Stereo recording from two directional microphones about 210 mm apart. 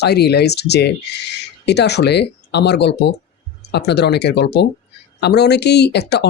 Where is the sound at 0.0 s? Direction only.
50° left (ahead or behind).